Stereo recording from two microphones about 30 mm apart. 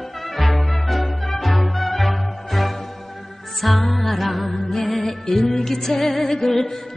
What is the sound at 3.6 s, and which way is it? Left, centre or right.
Music, centre.